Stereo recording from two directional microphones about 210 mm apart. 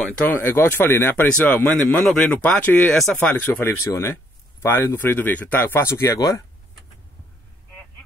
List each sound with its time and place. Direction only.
0.3 s speech: 10° left (ahead or behind)